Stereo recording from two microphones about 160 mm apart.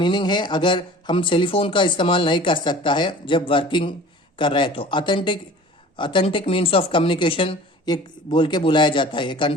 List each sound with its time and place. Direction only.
0.0 s speech: 30° left (ahead or behind)